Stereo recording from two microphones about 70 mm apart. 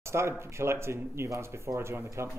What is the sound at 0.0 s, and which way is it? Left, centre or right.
Speech, right.